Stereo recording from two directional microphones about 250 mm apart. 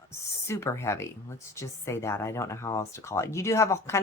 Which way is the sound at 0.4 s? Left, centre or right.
Centre.